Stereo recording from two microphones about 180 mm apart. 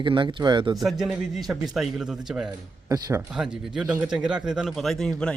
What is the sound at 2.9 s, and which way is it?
Speech, 15° right (ahead or behind).